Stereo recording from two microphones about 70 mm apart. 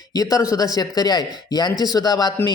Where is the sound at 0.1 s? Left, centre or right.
Left.